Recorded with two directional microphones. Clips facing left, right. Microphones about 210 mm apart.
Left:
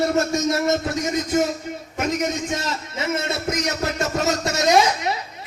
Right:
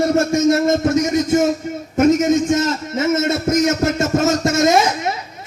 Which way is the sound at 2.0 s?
45° right (ahead or behind).